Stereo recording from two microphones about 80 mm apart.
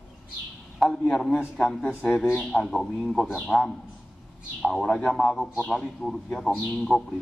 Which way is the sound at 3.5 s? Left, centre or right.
Centre.